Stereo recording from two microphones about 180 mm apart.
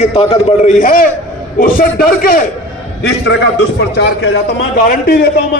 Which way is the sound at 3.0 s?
70° left (ahead or behind).